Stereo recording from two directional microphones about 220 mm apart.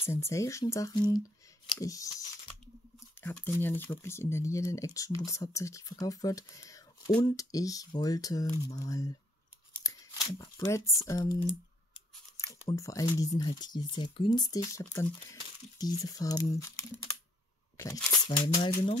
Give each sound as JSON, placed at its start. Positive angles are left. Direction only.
{"t": 0.0, "sound": "speech", "side_deg": 10}
{"t": 9.8, "sound": "a sound", "side_deg": 15}
{"t": 11.1, "sound": "speech", "side_deg": 15}
{"t": 18.2, "sound": "speech", "side_deg": 20}